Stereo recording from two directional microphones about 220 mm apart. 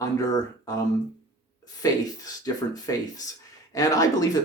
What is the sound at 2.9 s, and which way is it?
Speech, 15° left (ahead or behind).